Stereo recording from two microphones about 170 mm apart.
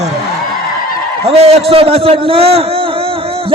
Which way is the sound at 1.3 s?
35° right (ahead or behind).